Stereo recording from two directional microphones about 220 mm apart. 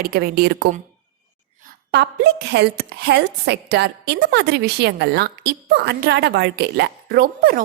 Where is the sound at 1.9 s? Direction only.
50° right (ahead or behind).